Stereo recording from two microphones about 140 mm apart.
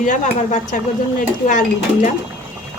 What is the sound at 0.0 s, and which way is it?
A woman's voice, 65° left (ahead or behind).